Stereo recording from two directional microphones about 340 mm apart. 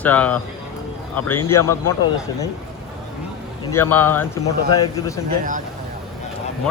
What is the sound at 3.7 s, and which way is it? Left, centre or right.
A man's voice, centre.